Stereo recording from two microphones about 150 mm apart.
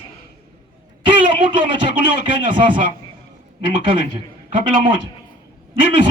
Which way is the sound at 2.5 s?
30° right (ahead or behind).